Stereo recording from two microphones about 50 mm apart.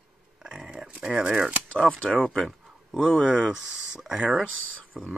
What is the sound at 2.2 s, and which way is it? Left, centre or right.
Speech, centre.